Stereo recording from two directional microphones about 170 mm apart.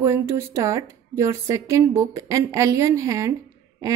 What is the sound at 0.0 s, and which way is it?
A woman's voice, 15° right (ahead or behind).